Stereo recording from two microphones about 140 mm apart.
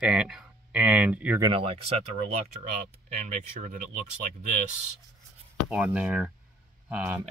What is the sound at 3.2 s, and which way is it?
Speech, 65° right (ahead or behind).